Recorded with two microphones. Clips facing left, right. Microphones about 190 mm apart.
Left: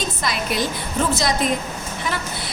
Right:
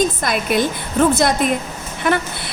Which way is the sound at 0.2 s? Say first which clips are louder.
Right 5 dB; 50° right (ahead or behind).